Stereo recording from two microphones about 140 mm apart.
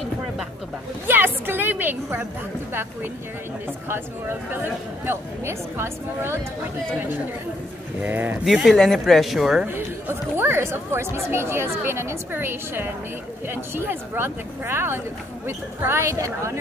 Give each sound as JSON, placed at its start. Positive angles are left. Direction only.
{"t": 1.0, "sound": "a sound", "side_deg": -15}
{"t": 2.7, "sound": "speech", "side_deg": -15}
{"t": 8.0, "sound": "speech", "side_deg": -15}
{"t": 8.5, "sound": "speech", "side_deg": 0}
{"t": 9.7, "sound": "speech", "side_deg": -15}